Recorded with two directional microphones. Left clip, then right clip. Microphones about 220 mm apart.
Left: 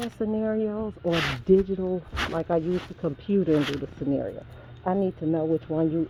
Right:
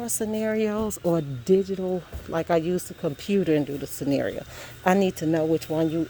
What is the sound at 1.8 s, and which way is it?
Speech, 25° right (ahead or behind).